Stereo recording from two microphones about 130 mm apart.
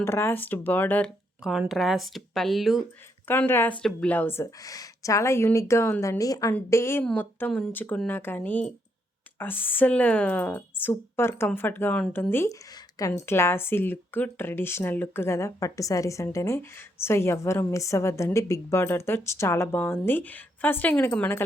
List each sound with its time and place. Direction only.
0.0 s a woman's voice: 20° left (ahead or behind)
1.5 s speech: centre (ahead or behind)
3.2 s a woman's voice: 15° left (ahead or behind)
4.6 s a woman's voice: 25° left (ahead or behind)